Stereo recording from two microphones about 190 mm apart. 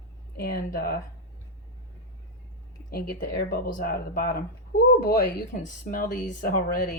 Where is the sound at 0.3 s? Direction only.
55° left (ahead or behind).